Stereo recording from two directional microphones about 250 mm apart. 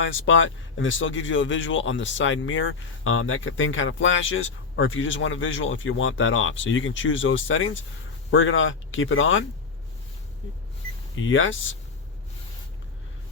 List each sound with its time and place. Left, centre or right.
0.0 s speech: left
11.1 s speech: left